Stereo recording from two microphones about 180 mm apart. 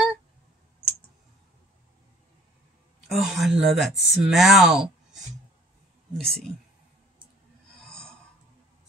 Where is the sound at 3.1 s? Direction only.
Centre (ahead or behind).